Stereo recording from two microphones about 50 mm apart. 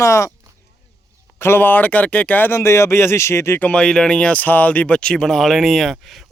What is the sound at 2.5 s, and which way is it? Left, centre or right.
Speech, left.